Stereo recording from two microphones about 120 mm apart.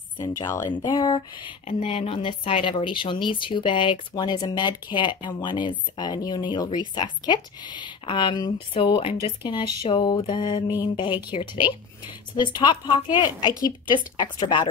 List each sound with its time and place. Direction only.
0.2 s speech: 30° left (ahead or behind)
1.7 s speech: 50° left (ahead or behind)